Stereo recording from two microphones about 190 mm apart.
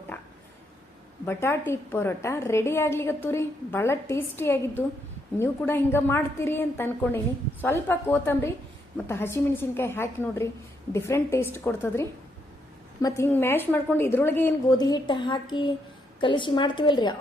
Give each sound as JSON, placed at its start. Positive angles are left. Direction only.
{"t": 1.2, "sound": "a woman's voice", "side_deg": 15}